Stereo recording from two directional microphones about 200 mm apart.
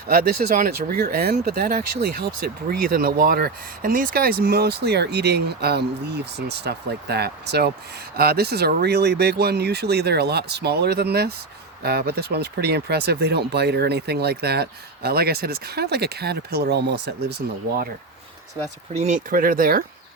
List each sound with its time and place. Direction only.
0.1 s speech: 50° right (ahead or behind)
18.9 s speech: 35° right (ahead or behind)